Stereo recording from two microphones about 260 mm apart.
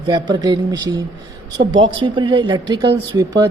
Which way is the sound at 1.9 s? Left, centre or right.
Centre.